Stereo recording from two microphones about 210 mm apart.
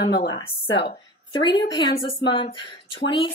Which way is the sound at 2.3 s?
25° left (ahead or behind).